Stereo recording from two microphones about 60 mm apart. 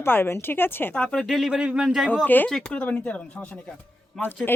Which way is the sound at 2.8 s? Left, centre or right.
Left.